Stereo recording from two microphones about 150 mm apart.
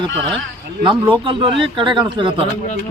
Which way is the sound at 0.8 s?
35° right (ahead or behind).